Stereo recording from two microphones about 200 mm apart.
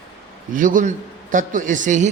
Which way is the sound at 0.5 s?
40° right (ahead or behind).